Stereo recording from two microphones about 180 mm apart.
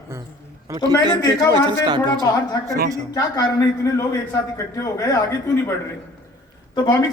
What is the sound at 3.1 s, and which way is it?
A man's voice, 20° left (ahead or behind).